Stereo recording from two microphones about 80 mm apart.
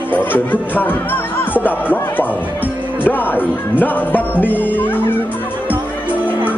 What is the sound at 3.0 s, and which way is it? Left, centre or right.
Music, left.